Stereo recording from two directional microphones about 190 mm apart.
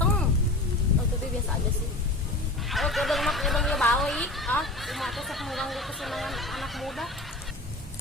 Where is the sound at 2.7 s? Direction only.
Centre (ahead or behind).